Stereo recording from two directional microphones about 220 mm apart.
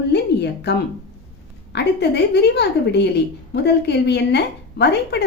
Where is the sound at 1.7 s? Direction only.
50° left (ahead or behind).